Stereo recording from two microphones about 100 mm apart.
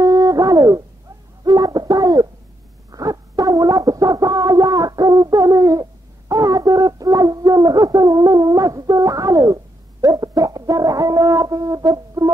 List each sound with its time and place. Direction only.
0.0 s a sound: 35° right (ahead or behind)
2.9 s music: 35° right (ahead or behind)
10.0 s brass instrument: 40° right (ahead or behind)